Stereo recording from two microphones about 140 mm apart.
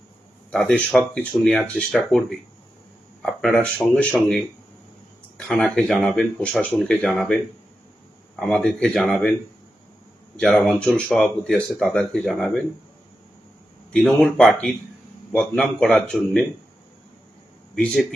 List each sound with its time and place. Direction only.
0.5 s speech: centre (ahead or behind)
3.4 s speech: 5° left (ahead or behind)
5.4 s speech: 5° left (ahead or behind)
8.4 s speech: 5° left (ahead or behind)
10.3 s speech: 5° left (ahead or behind)
13.9 s speech: 5° left (ahead or behind)